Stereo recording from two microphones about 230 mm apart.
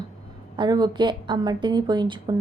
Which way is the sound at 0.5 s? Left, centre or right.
Centre.